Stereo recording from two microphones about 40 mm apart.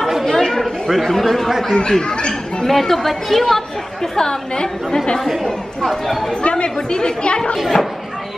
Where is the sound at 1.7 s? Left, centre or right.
Centre.